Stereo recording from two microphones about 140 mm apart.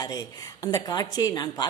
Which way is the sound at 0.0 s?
25° left (ahead or behind).